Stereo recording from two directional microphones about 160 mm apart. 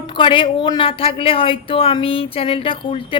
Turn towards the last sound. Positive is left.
turn(degrees=35)  # may be behind; listen again after turning